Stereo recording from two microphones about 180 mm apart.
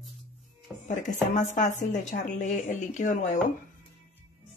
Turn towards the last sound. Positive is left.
turn(degrees=45)  # may be behind; listen again after turning